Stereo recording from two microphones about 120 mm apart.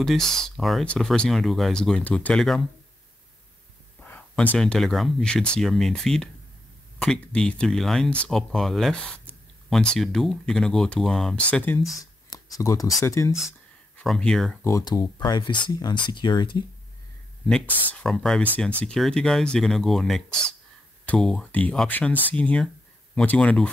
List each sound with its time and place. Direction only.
0.0 s speech: 5° left (ahead or behind)
4.0 s speech: 15° left (ahead or behind)
12.0 s a sound: 30° left (ahead or behind)
13.0 s speech: 25° left (ahead or behind)
14.0 s speech: 5° left (ahead or behind)
14.6 s speech: 30° left (ahead or behind)
17.5 s speech: 5° left (ahead or behind)